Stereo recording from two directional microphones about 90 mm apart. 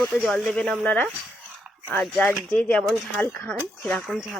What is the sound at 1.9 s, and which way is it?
Speech, 15° left (ahead or behind).